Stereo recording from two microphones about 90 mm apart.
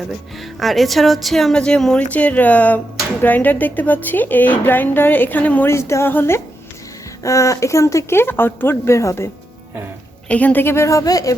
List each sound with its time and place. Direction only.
0.6 s speech: centre (ahead or behind); by 5.6 s 20° left (ahead or behind)
5.6 s speech: 30° left (ahead or behind)
7.2 s speech: 35° left (ahead or behind)
10.2 s speech: 15° left (ahead or behind); by 11.3 s 40° left (ahead or behind)